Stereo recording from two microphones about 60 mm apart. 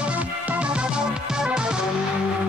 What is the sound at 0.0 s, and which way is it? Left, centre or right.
Music, right.